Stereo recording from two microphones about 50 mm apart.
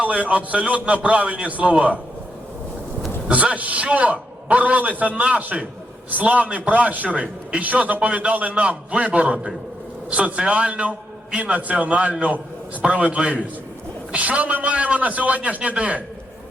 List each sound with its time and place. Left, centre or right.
0.0 s a man's voice: right
3.3 s a man's voice: right